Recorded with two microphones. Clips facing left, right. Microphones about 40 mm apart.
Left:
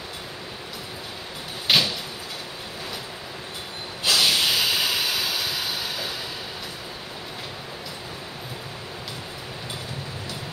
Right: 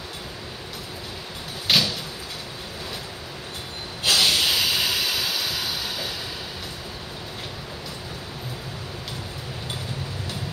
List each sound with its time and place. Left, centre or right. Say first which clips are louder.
1.7 s a sound: left 1 dB; centre
4.0 s hiss: right 1 dB; centre
4.3 s vehicle: even; centre